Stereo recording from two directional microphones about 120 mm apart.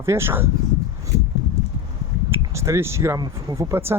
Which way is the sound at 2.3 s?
25° right (ahead or behind).